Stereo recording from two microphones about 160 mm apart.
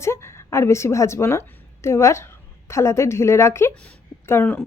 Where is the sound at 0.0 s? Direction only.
15° left (ahead or behind).